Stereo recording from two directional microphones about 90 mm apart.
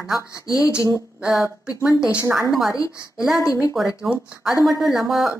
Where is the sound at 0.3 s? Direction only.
40° left (ahead or behind).